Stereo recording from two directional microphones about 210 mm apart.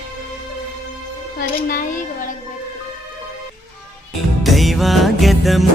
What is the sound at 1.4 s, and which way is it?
Speech, 40° left (ahead or behind).